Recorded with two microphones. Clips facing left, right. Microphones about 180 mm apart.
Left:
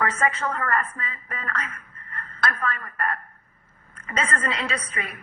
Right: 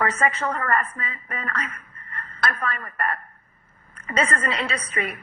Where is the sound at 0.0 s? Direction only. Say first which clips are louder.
Right 1 dB; 30° right (ahead or behind).